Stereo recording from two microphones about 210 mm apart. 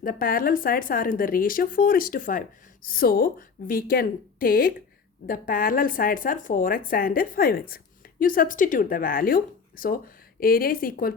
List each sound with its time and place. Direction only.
0.0 s a woman's voice: 45° left (ahead or behind)